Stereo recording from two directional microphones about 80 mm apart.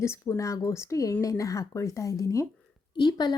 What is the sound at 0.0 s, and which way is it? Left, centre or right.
Speech, left.